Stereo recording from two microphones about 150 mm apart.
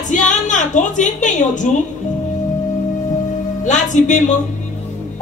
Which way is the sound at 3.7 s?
55° left (ahead or behind).